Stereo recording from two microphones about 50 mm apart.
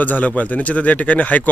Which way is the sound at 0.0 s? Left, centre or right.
Left.